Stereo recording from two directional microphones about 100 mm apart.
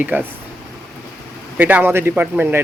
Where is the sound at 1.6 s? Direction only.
15° right (ahead or behind).